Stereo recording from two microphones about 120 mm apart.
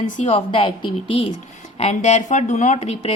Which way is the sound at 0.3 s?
50° left (ahead or behind).